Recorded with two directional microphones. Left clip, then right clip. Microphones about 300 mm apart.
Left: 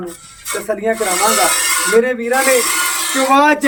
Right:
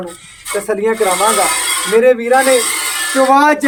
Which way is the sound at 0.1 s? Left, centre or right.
Centre.